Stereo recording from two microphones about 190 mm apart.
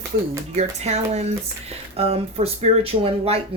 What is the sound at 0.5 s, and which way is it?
Speech, 35° right (ahead or behind).